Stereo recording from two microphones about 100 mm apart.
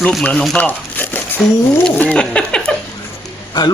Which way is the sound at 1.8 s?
10° left (ahead or behind).